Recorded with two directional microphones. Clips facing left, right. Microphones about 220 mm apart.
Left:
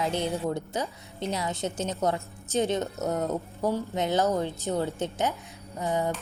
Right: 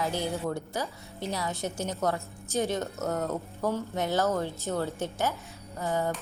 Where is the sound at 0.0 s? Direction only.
20° left (ahead or behind).